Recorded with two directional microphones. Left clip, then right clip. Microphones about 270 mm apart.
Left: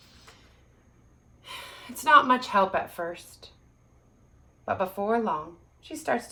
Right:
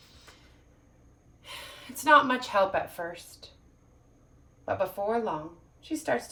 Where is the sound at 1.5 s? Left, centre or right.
Centre.